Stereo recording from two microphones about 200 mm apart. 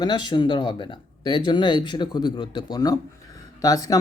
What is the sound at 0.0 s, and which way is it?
Speech, 20° left (ahead or behind).